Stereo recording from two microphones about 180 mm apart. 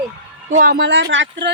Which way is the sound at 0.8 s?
80° right.